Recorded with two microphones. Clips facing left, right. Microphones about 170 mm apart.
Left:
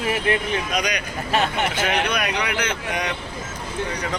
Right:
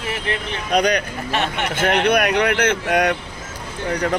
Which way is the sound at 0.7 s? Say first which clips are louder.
Right 7 dB; 55° right (ahead or behind).